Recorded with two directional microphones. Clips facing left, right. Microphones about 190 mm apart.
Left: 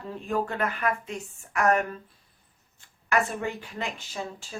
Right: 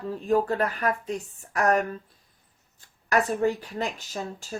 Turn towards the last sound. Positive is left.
turn(degrees=-40)  # may be behind; listen again after turning